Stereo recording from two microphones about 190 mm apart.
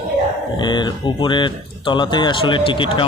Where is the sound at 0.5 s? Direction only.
25° left (ahead or behind).